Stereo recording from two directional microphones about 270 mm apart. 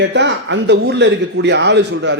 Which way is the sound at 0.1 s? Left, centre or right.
Right.